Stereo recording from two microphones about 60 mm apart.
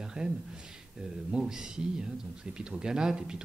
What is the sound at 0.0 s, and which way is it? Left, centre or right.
Speech, centre.